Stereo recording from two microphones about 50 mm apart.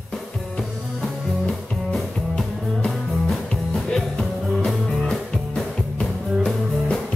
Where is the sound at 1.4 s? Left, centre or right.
Centre.